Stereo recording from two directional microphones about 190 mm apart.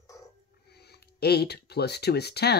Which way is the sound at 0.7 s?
60° left (ahead or behind).